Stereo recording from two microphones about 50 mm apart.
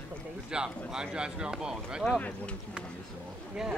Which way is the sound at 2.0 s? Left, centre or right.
Left.